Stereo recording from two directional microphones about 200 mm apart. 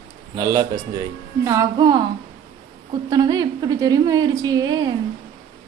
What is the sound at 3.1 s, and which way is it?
A woman's voice, 20° right (ahead or behind).